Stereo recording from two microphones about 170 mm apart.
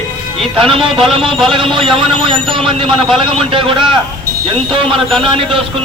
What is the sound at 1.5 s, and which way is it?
A man's voice, 30° right (ahead or behind).